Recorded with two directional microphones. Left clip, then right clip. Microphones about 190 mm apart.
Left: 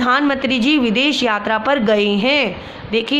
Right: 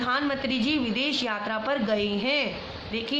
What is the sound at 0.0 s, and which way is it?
A woman's voice, 55° left (ahead or behind).